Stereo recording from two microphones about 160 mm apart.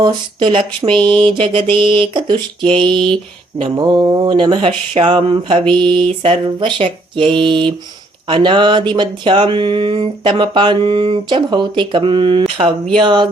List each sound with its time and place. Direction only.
0.0 s speech: 30° right (ahead or behind)